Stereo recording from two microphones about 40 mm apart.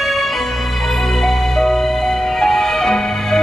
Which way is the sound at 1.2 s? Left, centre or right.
Centre.